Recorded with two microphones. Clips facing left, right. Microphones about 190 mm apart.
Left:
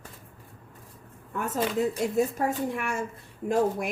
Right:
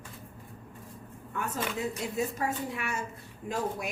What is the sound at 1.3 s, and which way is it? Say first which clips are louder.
Speech: left 6 dB; 45° left (ahead or behind).